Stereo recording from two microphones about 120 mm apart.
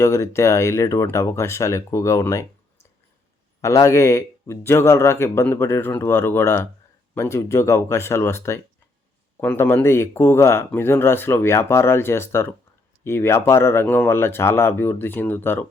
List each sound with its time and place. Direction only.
0.0 s speech: 25° left (ahead or behind)
3.6 s speech: 25° left (ahead or behind)